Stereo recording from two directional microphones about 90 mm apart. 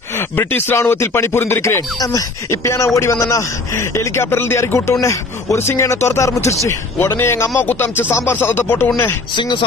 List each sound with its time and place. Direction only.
0.4 s speech: 25° left (ahead or behind)
2.0 s speech: 35° left (ahead or behind)
9.3 s speech: 60° left (ahead or behind)